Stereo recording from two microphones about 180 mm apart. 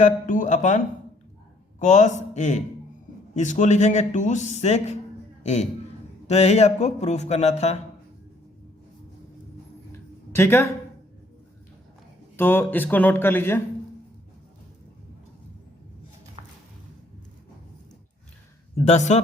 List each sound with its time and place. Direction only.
0.0 s speech: 45° left (ahead or behind)
1.8 s a man's voice: 40° left (ahead or behind)
5.4 s a sound: 40° left (ahead or behind)
6.2 s a man's voice: 40° left (ahead or behind)
10.3 s speech: 15° left (ahead or behind)
12.4 s speech: 10° left (ahead or behind)
18.9 s a man's voice: 40° left (ahead or behind)